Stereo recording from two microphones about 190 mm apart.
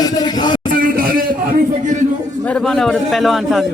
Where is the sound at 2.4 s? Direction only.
5° left (ahead or behind).